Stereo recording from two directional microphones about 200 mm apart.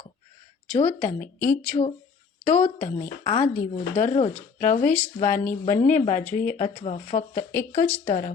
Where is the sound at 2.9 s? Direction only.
40° left (ahead or behind).